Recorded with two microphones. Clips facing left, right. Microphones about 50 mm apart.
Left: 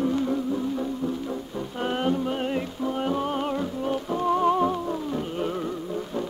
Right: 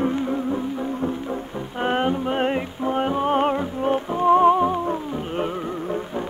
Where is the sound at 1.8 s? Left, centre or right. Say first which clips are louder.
Right 4 dB; right.